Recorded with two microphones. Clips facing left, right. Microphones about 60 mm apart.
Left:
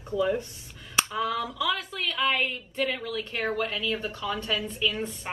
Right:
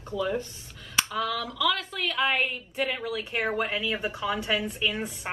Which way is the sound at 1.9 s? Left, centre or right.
Centre.